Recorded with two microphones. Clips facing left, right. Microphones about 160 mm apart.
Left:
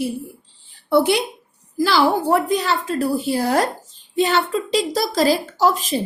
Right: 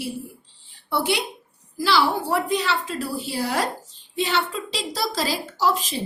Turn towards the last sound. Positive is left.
turn(degrees=50)  # may be behind; listen again after turning